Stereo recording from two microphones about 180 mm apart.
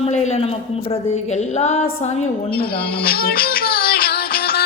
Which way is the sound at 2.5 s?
55° left (ahead or behind).